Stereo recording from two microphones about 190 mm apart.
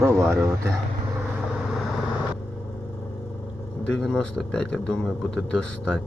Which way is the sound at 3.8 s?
5° left (ahead or behind).